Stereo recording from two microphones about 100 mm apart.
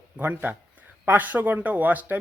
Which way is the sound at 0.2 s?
15° right (ahead or behind).